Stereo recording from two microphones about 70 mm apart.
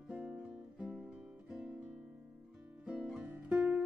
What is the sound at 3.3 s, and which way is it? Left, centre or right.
Music, right.